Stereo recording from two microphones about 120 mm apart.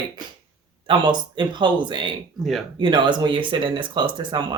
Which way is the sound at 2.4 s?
Centre (ahead or behind).